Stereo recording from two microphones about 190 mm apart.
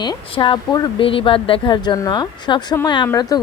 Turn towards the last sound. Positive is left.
turn(degrees=20)  # may be behind; listen again after turning